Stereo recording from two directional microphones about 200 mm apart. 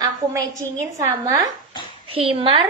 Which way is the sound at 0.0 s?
15° right (ahead or behind).